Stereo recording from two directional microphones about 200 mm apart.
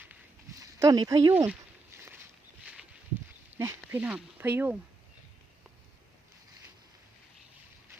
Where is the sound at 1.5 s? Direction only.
10° right (ahead or behind).